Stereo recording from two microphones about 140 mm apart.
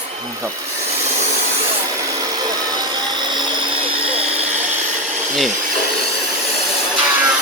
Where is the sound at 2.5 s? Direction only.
30° right (ahead or behind).